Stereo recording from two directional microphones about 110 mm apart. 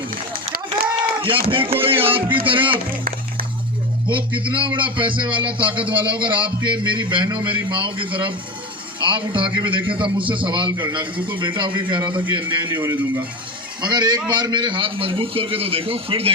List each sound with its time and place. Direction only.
1.2 s a man's voice: 50° right (ahead or behind)
4.1 s a man's voice: 50° right (ahead or behind)
12.8 s a man's voice: 30° right (ahead or behind); by 16.3 s 60° right (ahead or behind)